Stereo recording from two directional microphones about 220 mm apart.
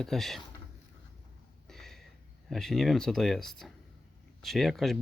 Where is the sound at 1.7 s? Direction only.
Centre (ahead or behind).